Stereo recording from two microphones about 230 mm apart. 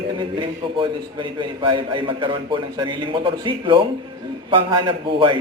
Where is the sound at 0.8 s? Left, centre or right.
Right.